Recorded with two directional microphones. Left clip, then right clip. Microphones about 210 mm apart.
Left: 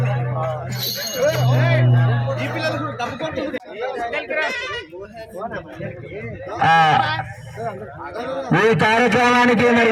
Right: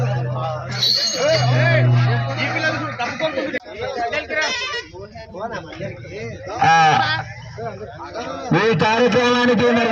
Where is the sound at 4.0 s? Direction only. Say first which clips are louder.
Right 2 dB; 10° right (ahead or behind).